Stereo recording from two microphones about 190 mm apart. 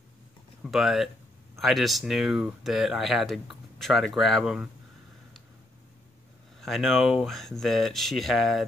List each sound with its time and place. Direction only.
0.7 s speech: centre (ahead or behind)
6.6 s speech: centre (ahead or behind)